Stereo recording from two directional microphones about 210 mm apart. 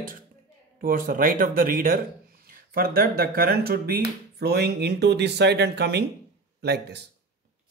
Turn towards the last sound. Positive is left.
turn(degrees=-50)  # may be behind; listen again after turning